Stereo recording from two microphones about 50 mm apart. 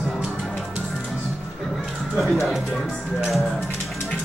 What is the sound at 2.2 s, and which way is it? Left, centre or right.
Music, centre.